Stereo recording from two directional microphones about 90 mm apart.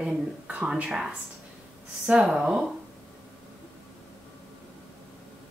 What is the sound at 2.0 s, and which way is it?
Speech, 5° right (ahead or behind).